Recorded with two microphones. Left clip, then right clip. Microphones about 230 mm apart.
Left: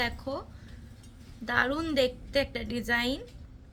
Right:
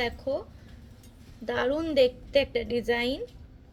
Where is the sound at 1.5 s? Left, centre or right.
Left.